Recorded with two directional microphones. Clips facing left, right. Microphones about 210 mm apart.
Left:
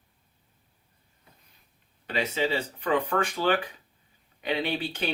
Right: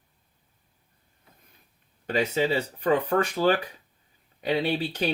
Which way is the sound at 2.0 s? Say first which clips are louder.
Right 3 dB; 45° right (ahead or behind).